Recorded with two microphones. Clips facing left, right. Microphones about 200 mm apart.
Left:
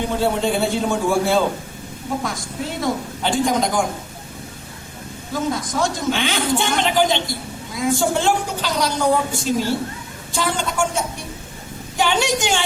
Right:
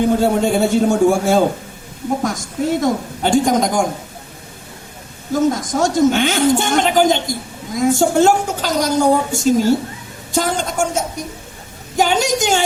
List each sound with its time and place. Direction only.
0.2 s a woman's voice: 45° right (ahead or behind)
2.8 s a woman's voice: 45° right (ahead or behind)
5.3 s a woman's voice: 45° right (ahead or behind)